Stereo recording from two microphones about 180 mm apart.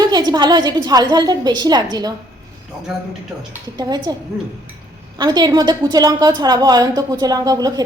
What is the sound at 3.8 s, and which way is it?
Speech, 20° right (ahead or behind).